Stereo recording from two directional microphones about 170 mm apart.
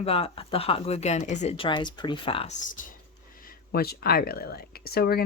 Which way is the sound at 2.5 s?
45° left (ahead or behind).